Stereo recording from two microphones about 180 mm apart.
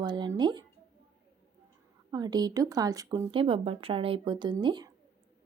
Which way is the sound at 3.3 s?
30° right (ahead or behind).